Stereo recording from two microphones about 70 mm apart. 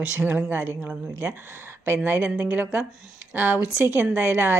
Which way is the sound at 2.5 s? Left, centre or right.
Centre.